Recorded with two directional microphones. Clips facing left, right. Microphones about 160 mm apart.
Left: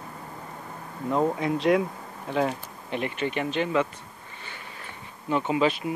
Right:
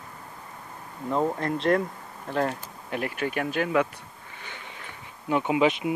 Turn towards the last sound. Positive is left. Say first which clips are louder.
# right 1 dB
turn(degrees=-15)  # may be behind; listen again after turning